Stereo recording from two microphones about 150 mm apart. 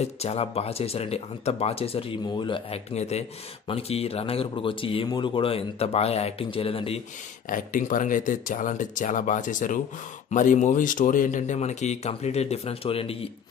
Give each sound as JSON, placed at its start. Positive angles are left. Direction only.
{"t": 0.0, "sound": "speech", "side_deg": 45}
{"t": 7.4, "sound": "speech", "side_deg": 65}